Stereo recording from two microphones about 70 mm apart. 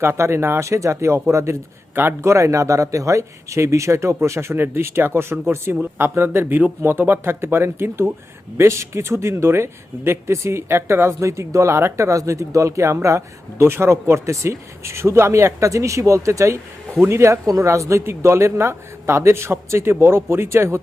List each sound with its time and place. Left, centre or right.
0.0 s speech: right
2.0 s speech: right
2.3 s speech: right
16.9 s speech: right
17.2 s speech: right